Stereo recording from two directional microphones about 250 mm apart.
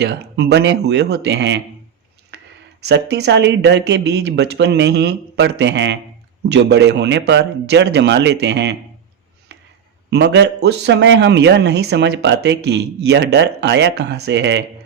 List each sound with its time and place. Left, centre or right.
0.0 s speech: right
2.3 s a sound: right
2.8 s speech: right
10.1 s speech: right